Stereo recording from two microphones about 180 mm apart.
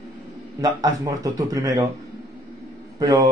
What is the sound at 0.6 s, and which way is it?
Speech, 20° right (ahead or behind).